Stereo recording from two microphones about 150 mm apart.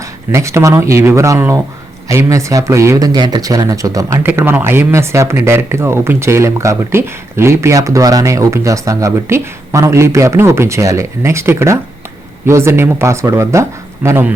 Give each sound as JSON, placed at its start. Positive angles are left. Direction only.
{"t": 0.3, "sound": "speech", "side_deg": -20}